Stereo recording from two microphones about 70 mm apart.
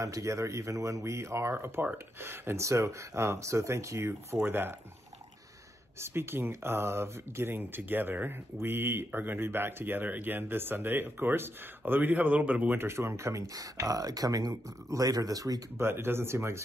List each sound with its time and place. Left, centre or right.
0.0 s speech: right
4.4 s speech: right
5.9 s speech: right
12.7 s speech: right
15.8 s speech: right